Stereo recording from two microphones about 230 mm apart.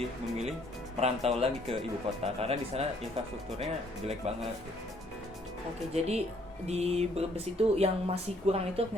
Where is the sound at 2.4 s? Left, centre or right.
Right.